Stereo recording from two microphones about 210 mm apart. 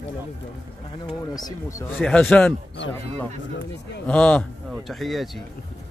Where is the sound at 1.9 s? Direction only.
5° left (ahead or behind).